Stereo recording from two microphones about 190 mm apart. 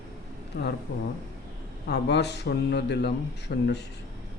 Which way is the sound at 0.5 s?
65° left (ahead or behind).